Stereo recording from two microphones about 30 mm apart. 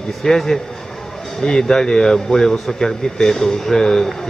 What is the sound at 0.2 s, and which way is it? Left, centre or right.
Speech, centre.